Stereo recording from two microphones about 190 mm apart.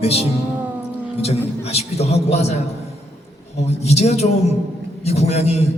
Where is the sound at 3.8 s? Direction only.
35° left (ahead or behind).